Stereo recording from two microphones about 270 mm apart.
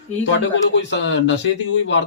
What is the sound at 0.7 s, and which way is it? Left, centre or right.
Speech, left.